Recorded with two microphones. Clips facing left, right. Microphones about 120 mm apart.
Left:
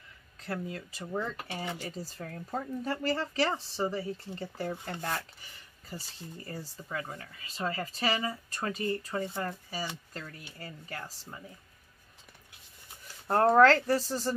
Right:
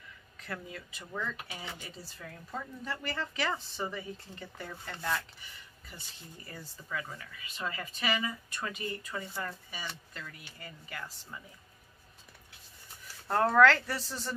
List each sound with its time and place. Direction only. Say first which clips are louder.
0.4 s speech: left 5 dB; 30° left (ahead or behind)
4.9 s speech: right 5 dB; 25° left (ahead or behind)
5.4 s speech: right 1 dB; 35° left (ahead or behind)
13.3 s speech: left 3 dB; 35° left (ahead or behind)